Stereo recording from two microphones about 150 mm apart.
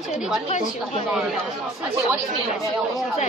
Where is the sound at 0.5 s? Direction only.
50° left (ahead or behind).